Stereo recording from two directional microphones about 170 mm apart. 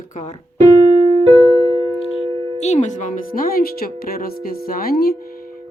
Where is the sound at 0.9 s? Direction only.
30° left (ahead or behind).